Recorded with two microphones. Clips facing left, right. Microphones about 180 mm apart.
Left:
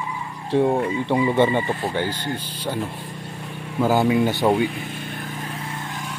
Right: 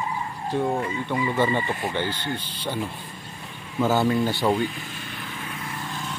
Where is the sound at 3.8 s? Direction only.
10° left (ahead or behind).